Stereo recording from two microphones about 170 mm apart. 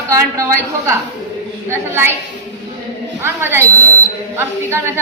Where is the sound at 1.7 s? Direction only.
15° right (ahead or behind).